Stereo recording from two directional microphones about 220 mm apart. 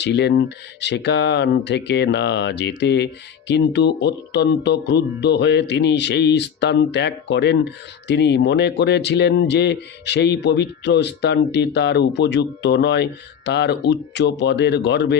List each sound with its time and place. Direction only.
0.0 s speech: 50° left (ahead or behind)